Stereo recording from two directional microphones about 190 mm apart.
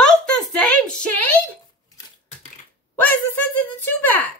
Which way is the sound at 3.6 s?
10° left (ahead or behind).